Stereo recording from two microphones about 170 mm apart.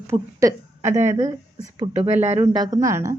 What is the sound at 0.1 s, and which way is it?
A woman's voice, 15° right (ahead or behind).